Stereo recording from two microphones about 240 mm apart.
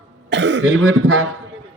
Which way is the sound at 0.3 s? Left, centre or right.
Right.